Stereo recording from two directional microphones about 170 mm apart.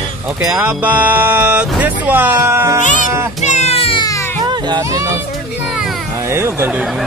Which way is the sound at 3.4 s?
40° left (ahead or behind).